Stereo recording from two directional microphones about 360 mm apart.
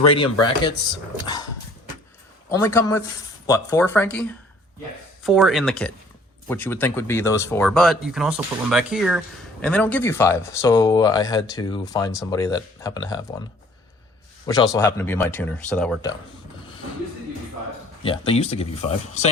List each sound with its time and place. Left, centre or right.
0.1 s speech: centre
2.5 s speech: centre
14.4 s speech: centre
18.0 s speech: centre